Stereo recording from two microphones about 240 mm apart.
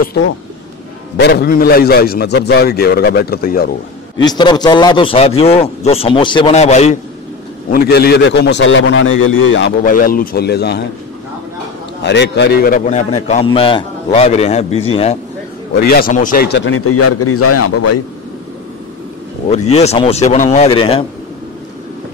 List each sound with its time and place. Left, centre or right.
0.0 s a man's voice: left
4.2 s a man's voice: centre
7.7 s a man's voice: left
9.8 s a man's voice: left
12.0 s a man's voice: left
15.7 s a man's voice: left
19.7 s a man's voice: left